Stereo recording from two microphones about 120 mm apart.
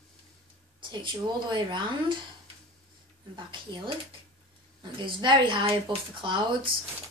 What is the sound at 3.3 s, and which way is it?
Speech, 45° right (ahead or behind).